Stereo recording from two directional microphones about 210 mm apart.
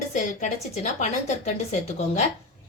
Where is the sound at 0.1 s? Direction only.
35° left (ahead or behind).